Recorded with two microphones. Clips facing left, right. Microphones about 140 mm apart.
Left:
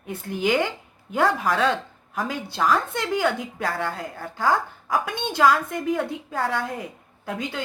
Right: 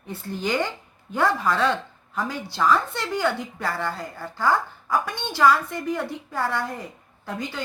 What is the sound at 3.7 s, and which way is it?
A woman's voice, 50° left (ahead or behind).